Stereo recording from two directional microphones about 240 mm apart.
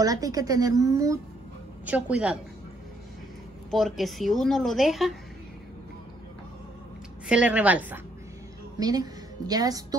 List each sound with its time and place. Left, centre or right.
0.0 s a woman's voice: centre
3.7 s a woman's voice: centre
7.2 s a woman's voice: centre